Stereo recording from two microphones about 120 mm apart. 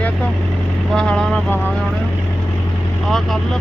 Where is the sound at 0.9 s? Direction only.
5° left (ahead or behind).